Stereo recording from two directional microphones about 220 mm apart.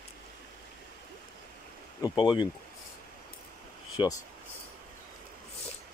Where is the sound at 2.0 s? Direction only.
20° left (ahead or behind).